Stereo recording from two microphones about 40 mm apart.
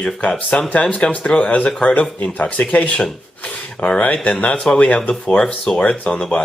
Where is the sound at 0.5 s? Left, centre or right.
Left.